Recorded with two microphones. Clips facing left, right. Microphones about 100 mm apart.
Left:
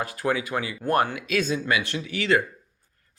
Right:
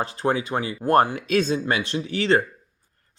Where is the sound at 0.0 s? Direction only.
30° right (ahead or behind).